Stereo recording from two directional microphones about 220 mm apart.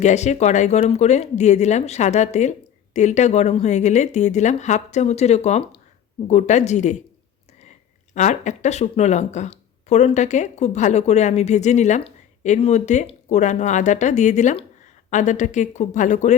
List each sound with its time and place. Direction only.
0.0 s speech: 30° left (ahead or behind)
8.1 s speech: 35° left (ahead or behind)